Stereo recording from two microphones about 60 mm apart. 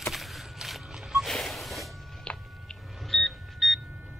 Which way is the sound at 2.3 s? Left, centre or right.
Centre.